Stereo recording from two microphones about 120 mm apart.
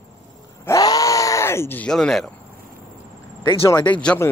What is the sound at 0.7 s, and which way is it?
Groan, 30° left (ahead or behind).